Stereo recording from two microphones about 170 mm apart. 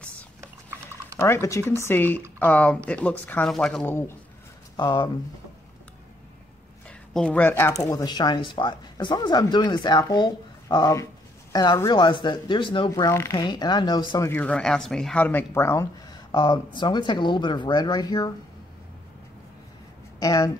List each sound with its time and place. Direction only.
1.2 s speech: 15° left (ahead or behind)
4.7 s speech: 25° left (ahead or behind)
7.2 s speech: 10° left (ahead or behind); by 14.3 s 25° left (ahead or behind)
14.3 s speech: 10° left (ahead or behind)
20.2 s speech: 20° left (ahead or behind)